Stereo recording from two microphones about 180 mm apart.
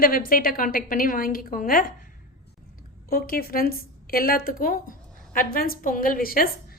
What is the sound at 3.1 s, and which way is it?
A woman's voice, 55° left (ahead or behind).